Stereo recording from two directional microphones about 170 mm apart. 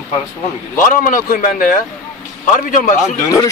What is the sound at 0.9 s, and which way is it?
Speech, 55° left (ahead or behind).